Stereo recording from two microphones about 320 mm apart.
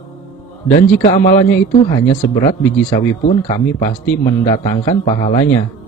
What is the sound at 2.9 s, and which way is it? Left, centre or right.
Speech, centre.